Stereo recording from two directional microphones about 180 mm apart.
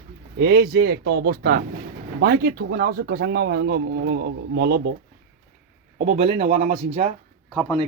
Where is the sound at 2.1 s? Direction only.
65° right (ahead or behind).